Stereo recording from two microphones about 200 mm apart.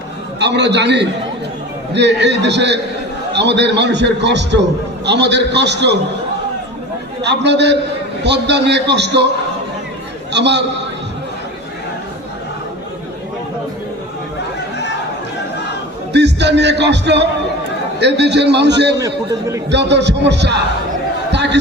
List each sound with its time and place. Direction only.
0.3 s a man's voice: 60° right (ahead or behind)
7.2 s a man's voice: 60° right (ahead or behind)
10.3 s a man's voice: 60° right (ahead or behind)
16.1 s a man's voice: 60° right (ahead or behind)
18.9 s a man's voice: 15° right (ahead or behind)
19.7 s a man's voice: 60° right (ahead or behind)